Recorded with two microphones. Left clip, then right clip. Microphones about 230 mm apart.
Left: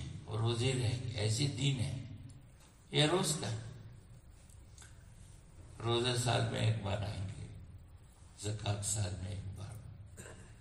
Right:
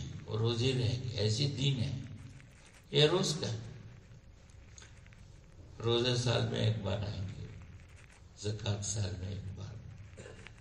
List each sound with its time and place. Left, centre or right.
0.3 s a man's voice: left
2.9 s a man's voice: left
5.8 s a man's voice: left
8.4 s speech: left